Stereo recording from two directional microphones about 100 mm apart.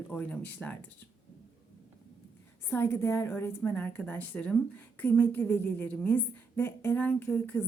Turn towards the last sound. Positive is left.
turn(degrees=20)  # may be behind; listen again after turning